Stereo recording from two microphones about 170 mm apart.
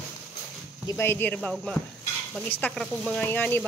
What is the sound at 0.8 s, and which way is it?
Speech, 15° left (ahead or behind).